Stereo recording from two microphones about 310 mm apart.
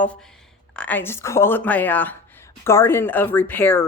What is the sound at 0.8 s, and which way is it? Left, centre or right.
Speech, centre.